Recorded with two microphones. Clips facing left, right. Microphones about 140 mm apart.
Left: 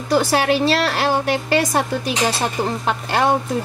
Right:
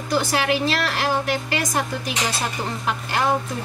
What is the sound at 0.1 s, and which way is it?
A woman's voice, 35° left (ahead or behind).